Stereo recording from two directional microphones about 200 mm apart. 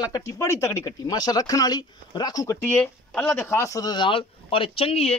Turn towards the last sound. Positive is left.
turn(degrees=30)  # may be behind; listen again after turning